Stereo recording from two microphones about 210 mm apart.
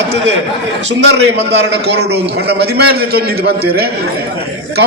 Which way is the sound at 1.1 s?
55° right (ahead or behind).